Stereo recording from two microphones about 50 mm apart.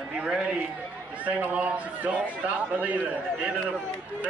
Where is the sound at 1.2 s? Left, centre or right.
Right.